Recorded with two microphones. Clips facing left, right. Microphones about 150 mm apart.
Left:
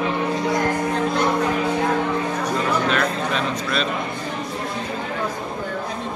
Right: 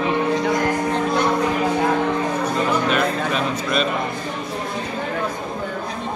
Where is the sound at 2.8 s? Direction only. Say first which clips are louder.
Right 1 dB; 10° right (ahead or behind).